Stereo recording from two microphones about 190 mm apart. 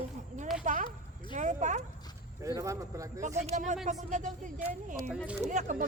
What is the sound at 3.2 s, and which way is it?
Speech, 40° right (ahead or behind).